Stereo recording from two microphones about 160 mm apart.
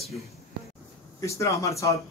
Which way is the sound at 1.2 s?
20° left (ahead or behind).